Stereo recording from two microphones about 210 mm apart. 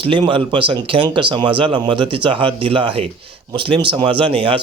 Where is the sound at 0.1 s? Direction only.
25° right (ahead or behind).